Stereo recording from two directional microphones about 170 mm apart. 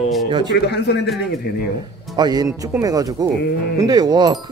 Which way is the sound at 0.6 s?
75° left (ahead or behind).